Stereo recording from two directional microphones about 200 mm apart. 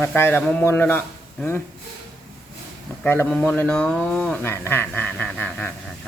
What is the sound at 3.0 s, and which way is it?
Speech, 10° left (ahead or behind).